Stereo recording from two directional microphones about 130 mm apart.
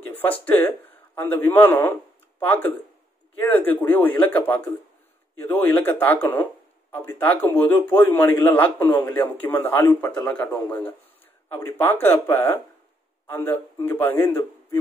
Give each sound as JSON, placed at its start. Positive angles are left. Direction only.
{"t": 0.1, "sound": "a man's voice", "side_deg": 15}